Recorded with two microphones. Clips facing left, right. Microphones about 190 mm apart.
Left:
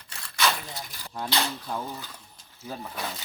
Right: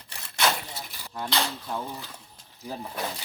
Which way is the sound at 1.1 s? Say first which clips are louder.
Even; 5° left (ahead or behind).